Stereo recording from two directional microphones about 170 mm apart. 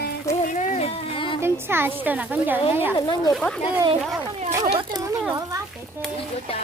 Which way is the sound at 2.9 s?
25° left (ahead or behind).